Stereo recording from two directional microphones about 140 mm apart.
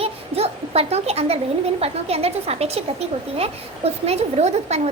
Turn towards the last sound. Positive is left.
turn(degrees=-50)  # may be behind; listen again after turning